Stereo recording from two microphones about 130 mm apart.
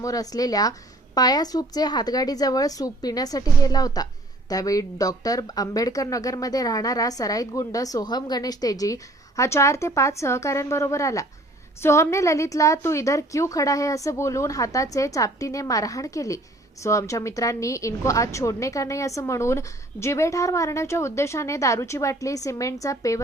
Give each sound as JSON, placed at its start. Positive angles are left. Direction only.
{"t": 0.0, "sound": "a woman's voice", "side_deg": 25}